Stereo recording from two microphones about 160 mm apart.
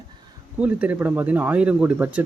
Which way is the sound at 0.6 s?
10° right (ahead or behind).